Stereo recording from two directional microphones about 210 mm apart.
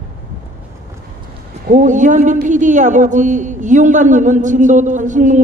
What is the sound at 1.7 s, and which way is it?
Speech, 35° right (ahead or behind).